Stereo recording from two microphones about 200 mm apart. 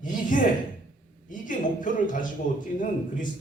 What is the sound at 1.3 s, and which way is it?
A man's voice, 40° left (ahead or behind).